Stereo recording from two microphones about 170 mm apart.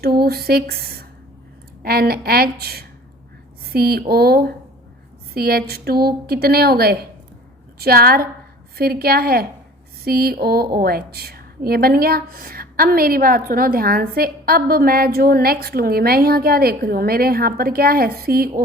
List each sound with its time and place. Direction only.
0.0 s a woman's voice: 65° right (ahead or behind)